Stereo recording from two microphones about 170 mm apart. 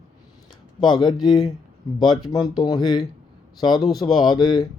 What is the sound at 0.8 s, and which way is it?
Speech, 25° left (ahead or behind).